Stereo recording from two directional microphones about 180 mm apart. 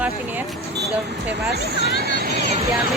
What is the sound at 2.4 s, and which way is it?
Vehicle, 35° right (ahead or behind).